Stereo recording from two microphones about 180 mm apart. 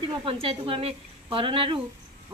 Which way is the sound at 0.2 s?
30° right (ahead or behind).